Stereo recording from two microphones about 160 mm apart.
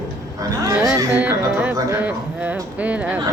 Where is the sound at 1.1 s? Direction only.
10° right (ahead or behind).